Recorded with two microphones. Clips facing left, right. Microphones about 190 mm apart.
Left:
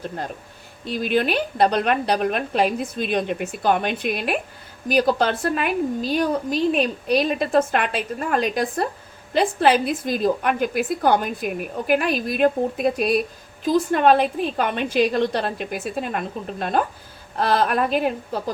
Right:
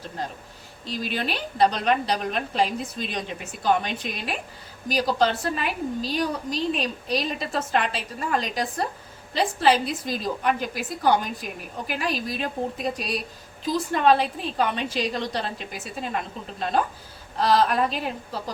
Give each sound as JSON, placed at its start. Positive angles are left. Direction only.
{"t": 0.9, "sound": "a woman's voice", "side_deg": 55}